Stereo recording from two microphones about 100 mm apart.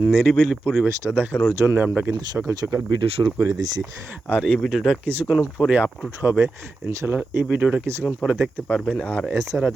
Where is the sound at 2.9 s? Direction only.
60° right (ahead or behind).